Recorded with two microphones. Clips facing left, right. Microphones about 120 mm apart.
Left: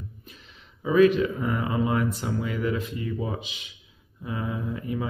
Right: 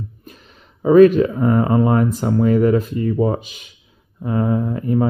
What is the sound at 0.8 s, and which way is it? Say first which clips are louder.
Speech: right 9 dB; 45° right (ahead or behind).